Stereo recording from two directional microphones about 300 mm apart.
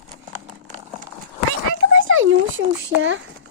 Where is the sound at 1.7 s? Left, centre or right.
Right.